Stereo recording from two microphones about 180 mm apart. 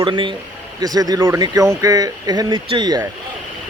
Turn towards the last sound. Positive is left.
turn(degrees=-20)  # may be behind; listen again after turning